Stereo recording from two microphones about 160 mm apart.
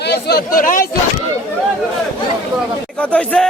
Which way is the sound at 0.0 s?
90° left.